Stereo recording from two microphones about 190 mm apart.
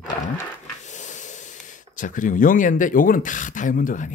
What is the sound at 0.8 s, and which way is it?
Hiss, 40° left (ahead or behind).